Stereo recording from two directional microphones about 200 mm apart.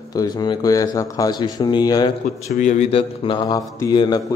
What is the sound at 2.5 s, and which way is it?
Speech, 35° left (ahead or behind).